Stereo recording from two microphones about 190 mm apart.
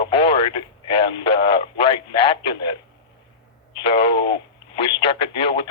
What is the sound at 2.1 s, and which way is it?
Speech, 30° left (ahead or behind).